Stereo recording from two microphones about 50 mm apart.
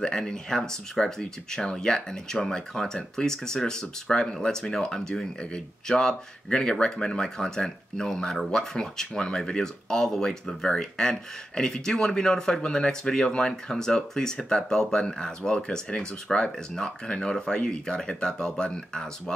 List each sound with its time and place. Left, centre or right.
0.0 s speech: centre